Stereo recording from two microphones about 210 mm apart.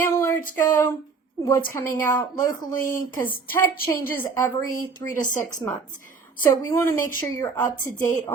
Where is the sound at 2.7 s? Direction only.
40° left (ahead or behind).